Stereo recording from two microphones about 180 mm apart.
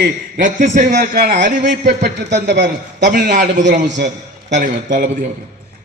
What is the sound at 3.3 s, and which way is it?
A man's voice, 40° right (ahead or behind).